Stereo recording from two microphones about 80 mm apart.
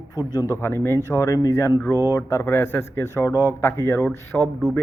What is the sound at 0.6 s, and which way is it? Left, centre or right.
Speech, left.